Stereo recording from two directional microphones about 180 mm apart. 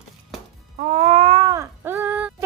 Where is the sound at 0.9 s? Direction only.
35° right (ahead or behind); by 2.3 s 10° right (ahead or behind).